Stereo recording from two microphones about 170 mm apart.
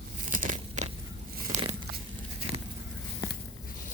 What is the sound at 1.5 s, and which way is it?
Crumpling, 45° right (ahead or behind).